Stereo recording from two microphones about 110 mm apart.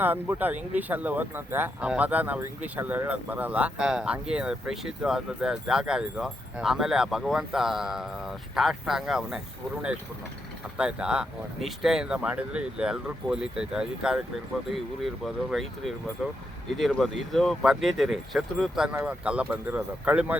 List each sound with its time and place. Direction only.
0.0 s speech: 15° right (ahead or behind)
10.8 s speech: 10° right (ahead or behind)
16.7 s speech: centre (ahead or behind)